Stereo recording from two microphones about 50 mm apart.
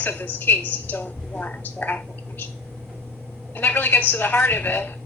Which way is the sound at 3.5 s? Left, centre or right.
Left.